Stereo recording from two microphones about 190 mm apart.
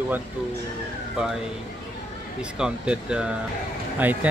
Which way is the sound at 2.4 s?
5° right (ahead or behind).